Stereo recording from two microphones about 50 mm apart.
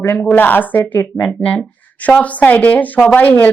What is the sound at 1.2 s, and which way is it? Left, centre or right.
Speech, left.